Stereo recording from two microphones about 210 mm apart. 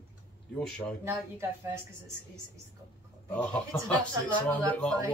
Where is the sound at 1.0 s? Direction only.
10° right (ahead or behind).